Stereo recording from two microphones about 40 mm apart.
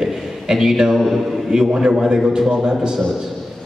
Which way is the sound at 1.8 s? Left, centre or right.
Centre.